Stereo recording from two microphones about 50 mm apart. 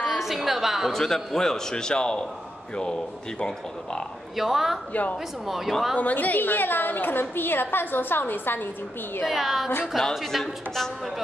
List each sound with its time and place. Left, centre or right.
0.0 s a woman's voice: centre
0.9 s a man's voice: centre
4.4 s a woman's voice: centre
5.9 s a woman's voice: left
9.3 s a woman's voice: centre